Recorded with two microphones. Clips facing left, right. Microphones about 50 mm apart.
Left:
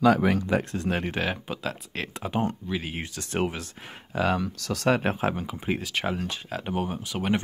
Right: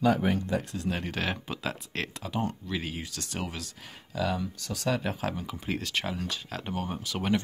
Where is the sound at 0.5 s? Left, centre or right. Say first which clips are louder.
Left 5 dB; left.